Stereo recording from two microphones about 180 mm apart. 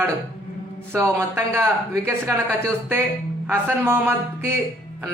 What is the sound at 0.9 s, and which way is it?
Speech, 15° right (ahead or behind).